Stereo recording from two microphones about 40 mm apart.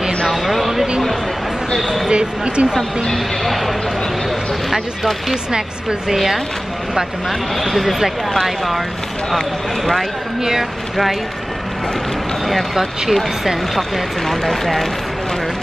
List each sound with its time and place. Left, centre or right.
0.3 s a sound: centre
1.8 s speech: centre
2.0 s speech: right
2.7 s speech: centre
6.0 s speech: centre
7.6 s speech: centre
12.4 s speech: centre